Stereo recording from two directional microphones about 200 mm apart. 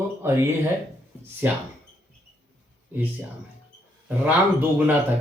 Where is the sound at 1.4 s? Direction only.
10° right (ahead or behind).